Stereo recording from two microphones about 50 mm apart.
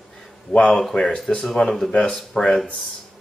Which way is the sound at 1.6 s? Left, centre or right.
Left.